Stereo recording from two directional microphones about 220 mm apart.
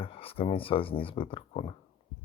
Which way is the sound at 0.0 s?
25° left (ahead or behind).